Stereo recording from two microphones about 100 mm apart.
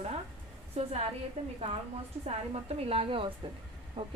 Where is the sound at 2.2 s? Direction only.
85° right; by 3.3 s 65° right (ahead or behind).